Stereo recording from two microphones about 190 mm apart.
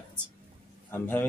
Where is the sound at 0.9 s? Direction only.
10° left (ahead or behind).